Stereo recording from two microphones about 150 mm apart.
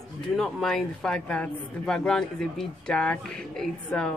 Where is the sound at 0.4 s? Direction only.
5° left (ahead or behind).